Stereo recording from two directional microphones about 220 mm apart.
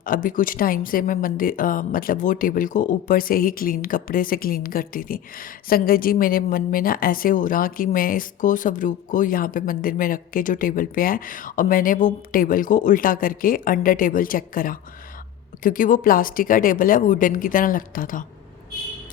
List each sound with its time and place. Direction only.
0.0 s speech: 40° left (ahead or behind)